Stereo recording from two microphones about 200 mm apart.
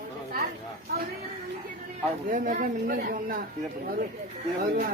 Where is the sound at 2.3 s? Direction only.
40° right (ahead or behind).